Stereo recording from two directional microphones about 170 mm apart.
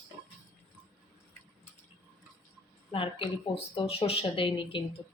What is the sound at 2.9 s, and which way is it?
Speech, 30° left (ahead or behind).